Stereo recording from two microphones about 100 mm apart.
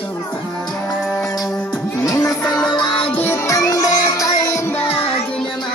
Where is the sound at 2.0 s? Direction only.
35° left (ahead or behind).